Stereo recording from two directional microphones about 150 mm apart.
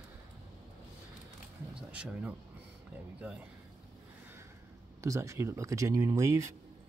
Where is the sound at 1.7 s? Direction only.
5° right (ahead or behind).